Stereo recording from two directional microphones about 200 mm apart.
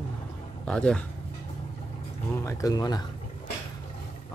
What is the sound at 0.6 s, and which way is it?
Speech, 5° left (ahead or behind).